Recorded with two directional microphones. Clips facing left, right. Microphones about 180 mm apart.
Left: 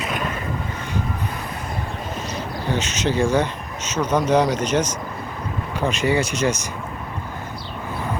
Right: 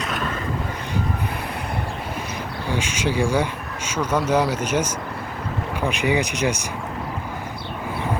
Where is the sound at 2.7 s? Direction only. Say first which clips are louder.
Left 1 dB; 10° right (ahead or behind).